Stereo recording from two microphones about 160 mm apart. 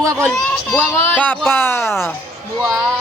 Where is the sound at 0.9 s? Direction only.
10° left (ahead or behind).